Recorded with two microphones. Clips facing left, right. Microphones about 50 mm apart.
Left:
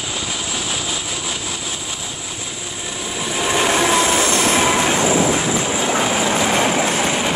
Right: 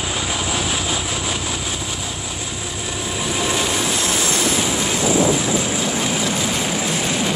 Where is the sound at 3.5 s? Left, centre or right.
Left.